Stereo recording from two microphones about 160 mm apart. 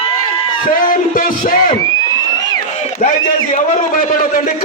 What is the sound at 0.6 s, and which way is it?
Speech, 60° left (ahead or behind).